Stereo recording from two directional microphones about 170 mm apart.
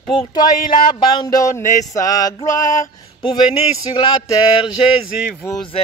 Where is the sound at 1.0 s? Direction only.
25° left (ahead or behind).